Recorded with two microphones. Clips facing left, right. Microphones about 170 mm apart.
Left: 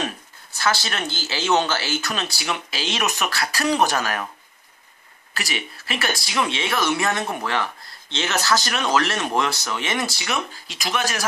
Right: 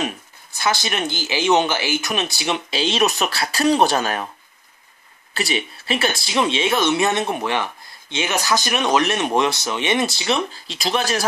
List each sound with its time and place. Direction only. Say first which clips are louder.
0.0 s speech: right 3 dB; 15° right (ahead or behind)
5.3 s speech: right 6 dB; 25° right (ahead or behind)